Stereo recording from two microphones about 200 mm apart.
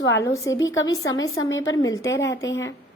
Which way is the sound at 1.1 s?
75° left (ahead or behind).